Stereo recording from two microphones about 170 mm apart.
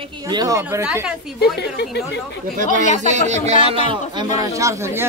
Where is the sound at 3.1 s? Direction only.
45° right (ahead or behind).